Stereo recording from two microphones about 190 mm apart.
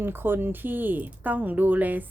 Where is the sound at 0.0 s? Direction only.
10° right (ahead or behind).